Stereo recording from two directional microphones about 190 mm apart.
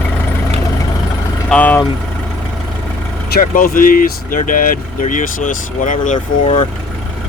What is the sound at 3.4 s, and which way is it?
Speech, 45° left (ahead or behind).